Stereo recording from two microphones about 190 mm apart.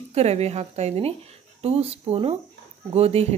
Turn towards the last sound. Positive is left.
turn(degrees=-35)  # may be behind; listen again after turning